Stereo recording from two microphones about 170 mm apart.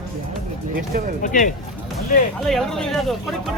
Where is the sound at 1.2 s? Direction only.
50° left (ahead or behind).